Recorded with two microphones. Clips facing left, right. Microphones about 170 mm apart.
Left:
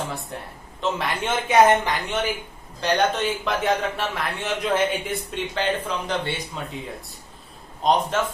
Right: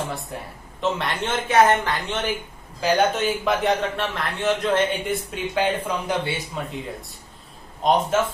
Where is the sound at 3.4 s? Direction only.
Centre (ahead or behind).